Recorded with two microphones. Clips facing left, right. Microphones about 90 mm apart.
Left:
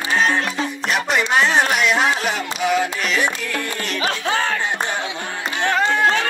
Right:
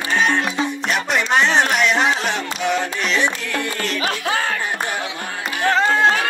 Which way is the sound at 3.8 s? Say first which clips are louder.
Even; 30° left (ahead or behind).